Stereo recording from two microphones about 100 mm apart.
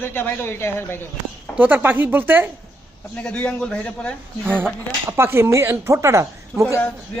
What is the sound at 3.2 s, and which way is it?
Speech, 10° left (ahead or behind).